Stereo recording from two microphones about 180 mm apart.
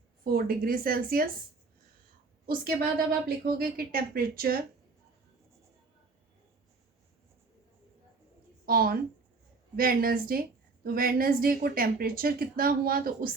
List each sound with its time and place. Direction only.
0.3 s a woman's voice: 55° right (ahead or behind)
2.5 s a woman's voice: 55° right (ahead or behind)
8.6 s a woman's voice: 55° right (ahead or behind)